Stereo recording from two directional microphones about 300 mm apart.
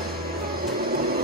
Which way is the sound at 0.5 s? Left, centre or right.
Right.